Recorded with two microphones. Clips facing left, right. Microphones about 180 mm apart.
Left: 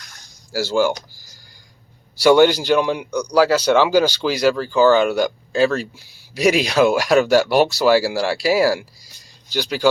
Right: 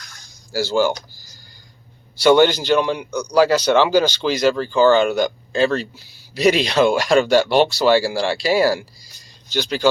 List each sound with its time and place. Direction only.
0.5 s speech: 5° left (ahead or behind)
2.1 s speech: 10° left (ahead or behind)